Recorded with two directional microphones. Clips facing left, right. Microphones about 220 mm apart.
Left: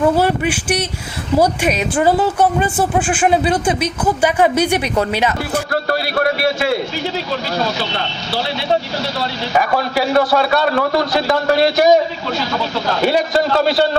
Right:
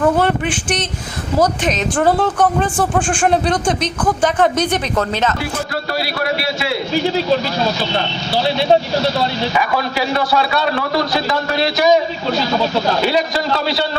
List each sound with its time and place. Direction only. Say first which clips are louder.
0.2 s speech: left 1 dB; 10° left (ahead or behind)
5.9 s a man's voice: left 3 dB; 50° left (ahead or behind)
9.6 s a man's voice: left 5 dB; 45° left (ahead or behind)
13.1 s a man's voice: left 2 dB; 50° left (ahead or behind)